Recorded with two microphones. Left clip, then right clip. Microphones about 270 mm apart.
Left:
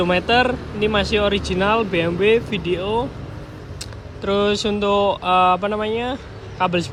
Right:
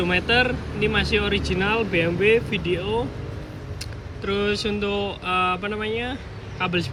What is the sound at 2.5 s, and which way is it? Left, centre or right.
Speech, centre.